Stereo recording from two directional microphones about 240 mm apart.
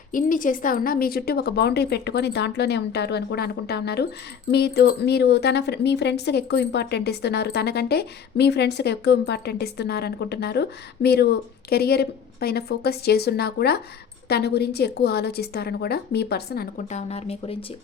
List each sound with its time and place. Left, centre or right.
0.1 s a woman's voice: left